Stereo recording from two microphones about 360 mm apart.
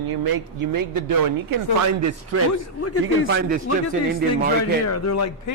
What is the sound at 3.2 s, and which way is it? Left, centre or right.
A man's voice, right.